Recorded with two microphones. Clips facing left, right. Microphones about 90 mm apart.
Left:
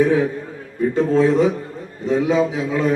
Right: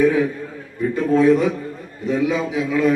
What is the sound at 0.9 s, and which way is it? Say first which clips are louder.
A man's voice: right 1 dB; 30° left (ahead or behind).